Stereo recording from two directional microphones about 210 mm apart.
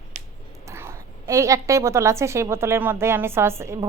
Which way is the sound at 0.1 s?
35° right (ahead or behind).